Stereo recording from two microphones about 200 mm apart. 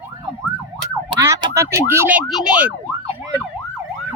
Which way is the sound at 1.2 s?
15° right (ahead or behind).